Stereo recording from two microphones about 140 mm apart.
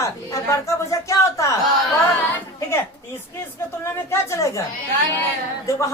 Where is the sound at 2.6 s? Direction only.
20° left (ahead or behind).